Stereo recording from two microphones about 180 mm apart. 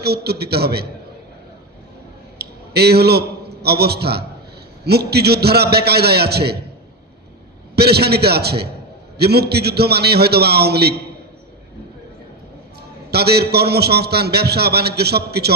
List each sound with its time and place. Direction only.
0.0 s a man's voice: 65° right (ahead or behind)
2.3 s a man's voice: 65° right (ahead or behind)
7.7 s a man's voice: 65° right (ahead or behind)
13.1 s a man's voice: 65° right (ahead or behind)